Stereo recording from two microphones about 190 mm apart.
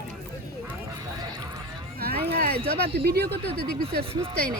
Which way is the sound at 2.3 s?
55° right (ahead or behind).